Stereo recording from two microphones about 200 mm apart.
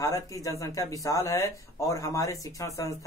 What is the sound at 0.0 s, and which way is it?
Speech, 15° left (ahead or behind).